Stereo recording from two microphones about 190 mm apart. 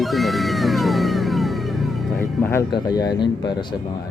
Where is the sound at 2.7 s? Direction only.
20° left (ahead or behind).